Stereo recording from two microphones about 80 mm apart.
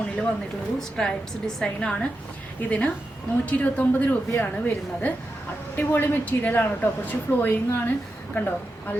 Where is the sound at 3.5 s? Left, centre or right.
Centre.